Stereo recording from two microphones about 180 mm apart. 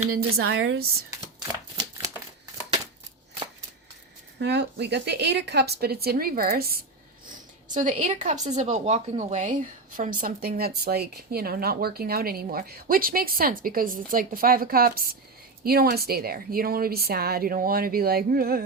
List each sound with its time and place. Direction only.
0.1 s speech: 60° right (ahead or behind); by 0.9 s 90° right
1.2 s shuffling cards: 20° right (ahead or behind)
4.4 s speech: 70° right (ahead or behind)
7.3 s speech: 45° right (ahead or behind)